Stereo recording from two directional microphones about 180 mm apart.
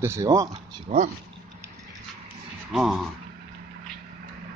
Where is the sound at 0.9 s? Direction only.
40° right (ahead or behind).